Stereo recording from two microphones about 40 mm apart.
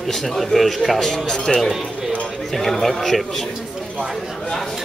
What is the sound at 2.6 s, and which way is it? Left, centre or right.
Speech, centre.